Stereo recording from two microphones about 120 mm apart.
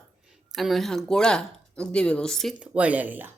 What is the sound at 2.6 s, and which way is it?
Speech, 10° right (ahead or behind).